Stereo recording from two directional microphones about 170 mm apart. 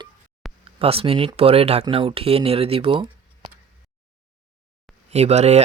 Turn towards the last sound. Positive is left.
turn(degrees=-40)  # may be behind; listen again after turning